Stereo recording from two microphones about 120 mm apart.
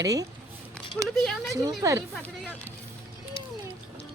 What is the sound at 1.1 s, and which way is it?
Speech, 5° left (ahead or behind).